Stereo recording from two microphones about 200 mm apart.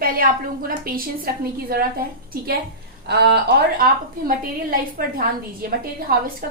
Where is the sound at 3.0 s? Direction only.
55° right (ahead or behind).